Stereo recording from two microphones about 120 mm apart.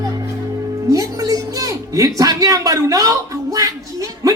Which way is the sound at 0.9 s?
25° right (ahead or behind).